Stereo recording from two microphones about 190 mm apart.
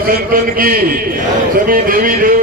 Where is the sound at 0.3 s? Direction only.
50° right (ahead or behind).